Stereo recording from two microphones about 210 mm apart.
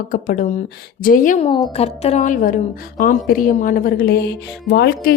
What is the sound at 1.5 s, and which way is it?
A woman's voice, 25° left (ahead or behind).